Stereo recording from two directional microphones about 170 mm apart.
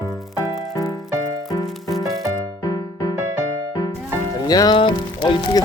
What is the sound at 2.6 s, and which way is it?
Music, 25° left (ahead or behind).